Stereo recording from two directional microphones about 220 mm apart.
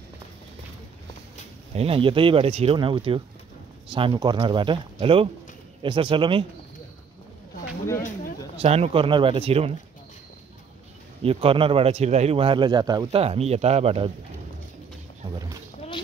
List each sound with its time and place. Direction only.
1.8 s speech: 25° right (ahead or behind)
8.5 s speech: 30° right (ahead or behind)
11.2 s speech: 25° right (ahead or behind)